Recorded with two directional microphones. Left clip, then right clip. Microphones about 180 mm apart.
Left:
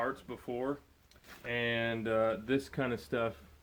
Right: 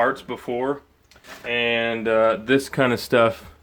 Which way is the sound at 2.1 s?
Centre (ahead or behind).